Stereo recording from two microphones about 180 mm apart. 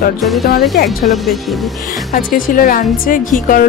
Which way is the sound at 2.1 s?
50° left (ahead or behind).